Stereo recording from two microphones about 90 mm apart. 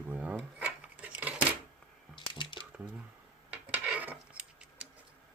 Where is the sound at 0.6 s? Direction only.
15° right (ahead or behind).